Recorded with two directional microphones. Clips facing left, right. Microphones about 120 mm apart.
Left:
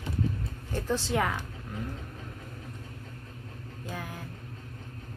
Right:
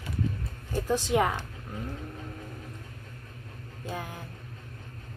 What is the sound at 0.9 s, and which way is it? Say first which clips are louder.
Speech: right 3 dB; 15° right (ahead or behind).